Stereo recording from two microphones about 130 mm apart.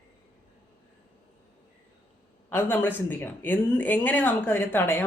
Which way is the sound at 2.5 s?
15° left (ahead or behind).